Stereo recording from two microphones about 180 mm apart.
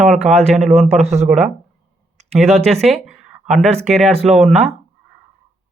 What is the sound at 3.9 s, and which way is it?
Speech, 35° right (ahead or behind).